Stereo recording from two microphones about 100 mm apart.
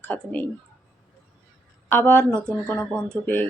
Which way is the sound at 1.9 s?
20° left (ahead or behind).